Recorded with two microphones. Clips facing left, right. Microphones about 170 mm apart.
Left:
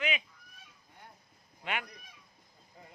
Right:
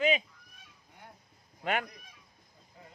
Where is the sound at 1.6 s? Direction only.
40° right (ahead or behind).